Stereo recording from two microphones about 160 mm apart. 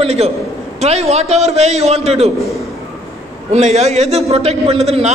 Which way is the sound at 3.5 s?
45° right (ahead or behind).